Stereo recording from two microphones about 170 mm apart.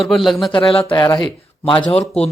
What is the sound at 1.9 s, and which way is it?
Speech, 40° left (ahead or behind).